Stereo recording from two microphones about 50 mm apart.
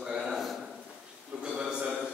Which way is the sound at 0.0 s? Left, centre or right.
Centre.